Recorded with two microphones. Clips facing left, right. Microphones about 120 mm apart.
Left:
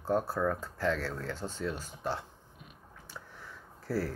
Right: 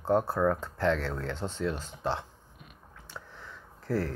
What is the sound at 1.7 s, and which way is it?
Speech, 20° right (ahead or behind).